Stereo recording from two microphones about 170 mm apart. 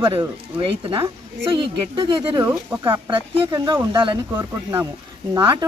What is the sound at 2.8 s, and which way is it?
Speech, 25° right (ahead or behind).